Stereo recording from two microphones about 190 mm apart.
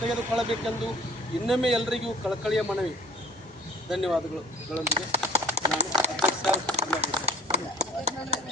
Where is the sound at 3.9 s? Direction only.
Centre (ahead or behind).